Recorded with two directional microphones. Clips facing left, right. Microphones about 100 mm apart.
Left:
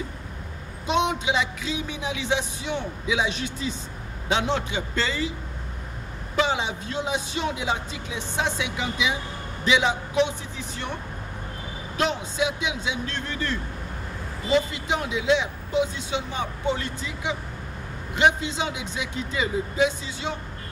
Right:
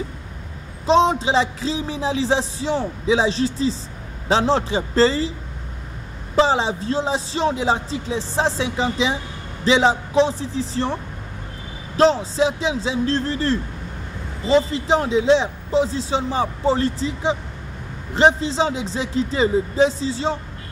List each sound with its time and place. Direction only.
0.8 s speech: 30° right (ahead or behind)
6.3 s speech: 30° right (ahead or behind)
12.0 s speech: 30° right (ahead or behind)